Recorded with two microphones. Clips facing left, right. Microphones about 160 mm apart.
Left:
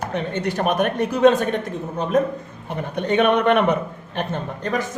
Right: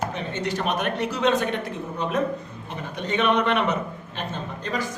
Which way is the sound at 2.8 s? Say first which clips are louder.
Left 6 dB; 55° left (ahead or behind).